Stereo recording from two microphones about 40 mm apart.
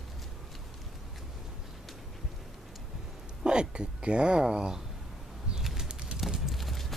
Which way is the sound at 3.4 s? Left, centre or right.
Right.